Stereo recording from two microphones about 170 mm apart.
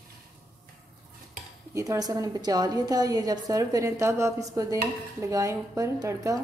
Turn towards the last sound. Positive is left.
turn(degrees=-20)  # may be behind; listen again after turning